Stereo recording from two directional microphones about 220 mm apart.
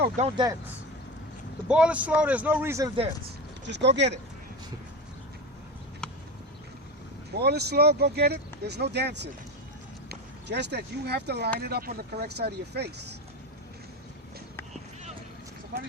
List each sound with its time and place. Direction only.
0.2 s speech: 20° right (ahead or behind)
1.6 s speech: 5° right (ahead or behind)
3.7 s speech: 50° right (ahead or behind)
6.0 s a sound: 5° left (ahead or behind)
7.3 s speech: 45° right (ahead or behind)